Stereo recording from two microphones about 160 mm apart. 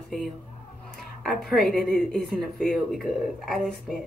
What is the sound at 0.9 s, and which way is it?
Speech, centre (ahead or behind).